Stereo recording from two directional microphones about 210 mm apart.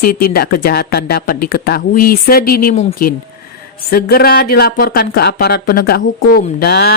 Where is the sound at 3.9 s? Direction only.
45° left (ahead or behind).